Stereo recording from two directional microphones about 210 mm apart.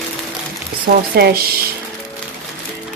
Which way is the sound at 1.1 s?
50° right (ahead or behind).